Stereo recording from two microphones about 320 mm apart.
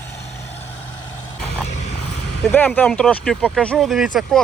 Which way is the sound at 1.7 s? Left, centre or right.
Left.